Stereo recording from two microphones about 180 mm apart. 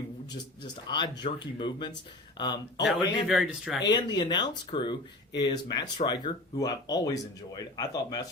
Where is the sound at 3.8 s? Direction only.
25° left (ahead or behind).